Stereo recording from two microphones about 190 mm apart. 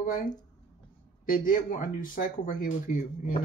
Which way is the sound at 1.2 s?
50° left (ahead or behind).